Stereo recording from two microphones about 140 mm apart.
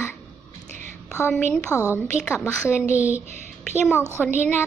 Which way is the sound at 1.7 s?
15° right (ahead or behind).